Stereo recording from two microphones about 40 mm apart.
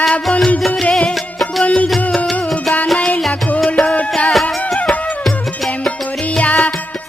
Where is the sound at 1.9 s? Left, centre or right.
Centre.